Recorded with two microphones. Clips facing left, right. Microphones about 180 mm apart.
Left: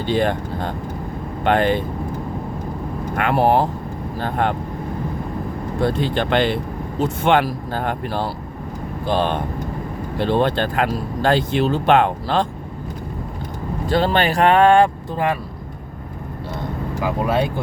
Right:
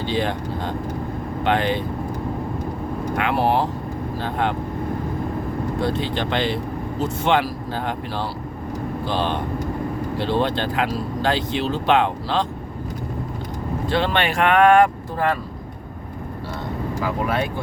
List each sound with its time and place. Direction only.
0.0 s speech: 50° left (ahead or behind)
3.2 s speech: 50° left (ahead or behind)
5.8 s speech: 50° left (ahead or behind)
13.8 s speech: 40° left (ahead or behind)